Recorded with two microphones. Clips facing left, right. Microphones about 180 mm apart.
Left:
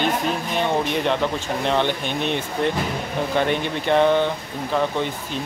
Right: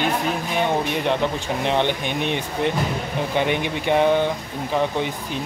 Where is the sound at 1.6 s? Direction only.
15° right (ahead or behind).